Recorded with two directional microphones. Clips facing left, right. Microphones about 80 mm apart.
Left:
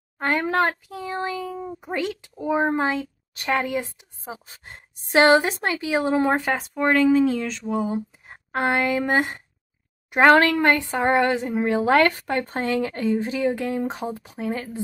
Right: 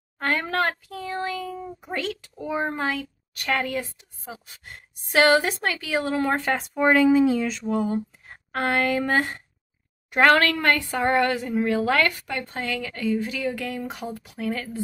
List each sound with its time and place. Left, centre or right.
0.2 s speech: centre
6.4 s speech: centre
7.6 s speech: centre
8.3 s speech: left